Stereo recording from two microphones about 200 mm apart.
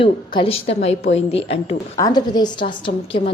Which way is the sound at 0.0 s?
25° left (ahead or behind).